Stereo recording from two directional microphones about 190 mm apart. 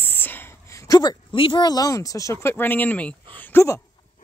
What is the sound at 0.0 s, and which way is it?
A woman's voice, 10° left (ahead or behind).